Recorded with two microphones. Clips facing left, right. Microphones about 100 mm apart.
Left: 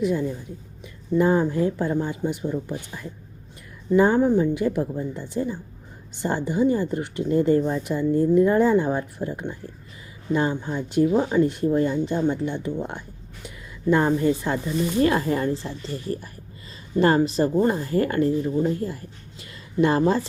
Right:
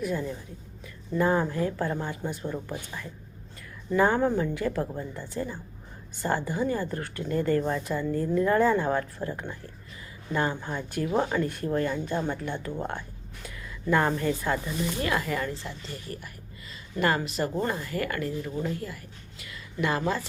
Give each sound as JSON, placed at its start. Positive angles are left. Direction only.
{"t": 0.0, "sound": "speech", "side_deg": 20}
{"t": 13.9, "sound": "speech", "side_deg": 25}
{"t": 19.4, "sound": "a sound", "side_deg": 30}